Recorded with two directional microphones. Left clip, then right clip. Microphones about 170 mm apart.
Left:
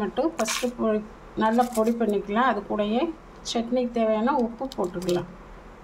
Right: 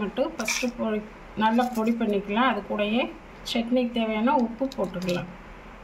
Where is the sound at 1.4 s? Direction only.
70° left (ahead or behind).